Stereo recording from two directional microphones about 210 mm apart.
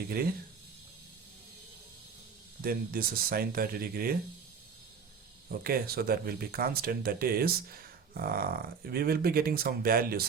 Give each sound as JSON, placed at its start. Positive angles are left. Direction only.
{"t": 2.6, "sound": "speech", "side_deg": -45}
{"t": 5.5, "sound": "speech", "side_deg": -45}